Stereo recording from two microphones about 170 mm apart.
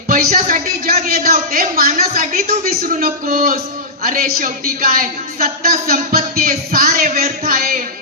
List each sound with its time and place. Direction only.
0.1 s a man's voice: 55° right (ahead or behind)